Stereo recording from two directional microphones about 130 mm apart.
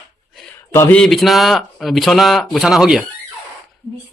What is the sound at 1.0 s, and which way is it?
Speech, centre (ahead or behind).